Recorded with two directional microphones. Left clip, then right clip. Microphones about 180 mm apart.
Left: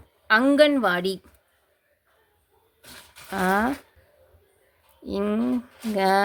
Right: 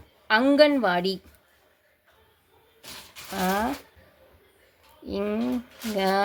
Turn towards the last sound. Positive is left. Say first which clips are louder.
# left 3 dB
turn(degrees=20)  # may be behind; listen again after turning